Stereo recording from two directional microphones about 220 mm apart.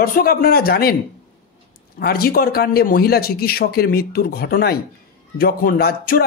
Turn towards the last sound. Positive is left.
turn(degrees=45)  # may be behind; listen again after turning